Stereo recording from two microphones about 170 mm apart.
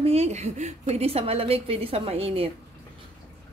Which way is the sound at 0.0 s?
40° right (ahead or behind).